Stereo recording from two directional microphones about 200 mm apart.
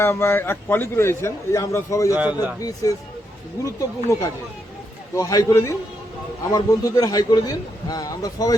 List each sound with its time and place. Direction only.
0.0 s a man's voice: 15° left (ahead or behind)
2.1 s a man's voice: 10° right (ahead or behind)
2.6 s a man's voice: 20° left (ahead or behind)